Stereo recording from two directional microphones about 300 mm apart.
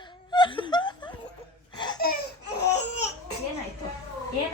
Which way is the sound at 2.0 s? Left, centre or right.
Left.